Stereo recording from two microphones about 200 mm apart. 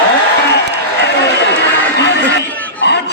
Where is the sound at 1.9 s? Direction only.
60° left (ahead or behind).